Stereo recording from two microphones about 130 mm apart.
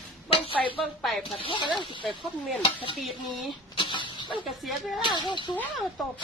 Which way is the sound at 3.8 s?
40° left (ahead or behind).